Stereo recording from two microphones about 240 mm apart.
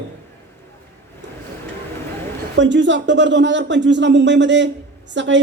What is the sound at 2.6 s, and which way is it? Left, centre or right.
Speech, right.